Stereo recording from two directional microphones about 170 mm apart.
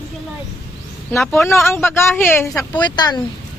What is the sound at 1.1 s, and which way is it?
Speech, centre (ahead or behind).